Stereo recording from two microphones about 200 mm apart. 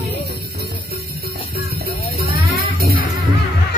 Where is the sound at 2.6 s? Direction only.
50° right (ahead or behind).